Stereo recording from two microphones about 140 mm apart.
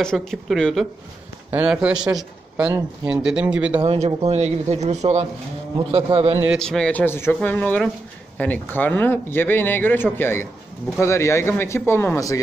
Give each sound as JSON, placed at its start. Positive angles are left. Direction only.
{"t": 0.0, "sound": "speech", "side_deg": 5}
{"t": 1.5, "sound": "speech", "side_deg": -10}
{"t": 3.8, "sound": "speech", "side_deg": -50}
{"t": 6.5, "sound": "a man's voice", "side_deg": 5}